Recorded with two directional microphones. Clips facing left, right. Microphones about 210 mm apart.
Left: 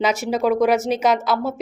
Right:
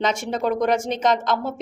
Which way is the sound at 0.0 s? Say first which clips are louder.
Left 3 dB; 5° left (ahead or behind).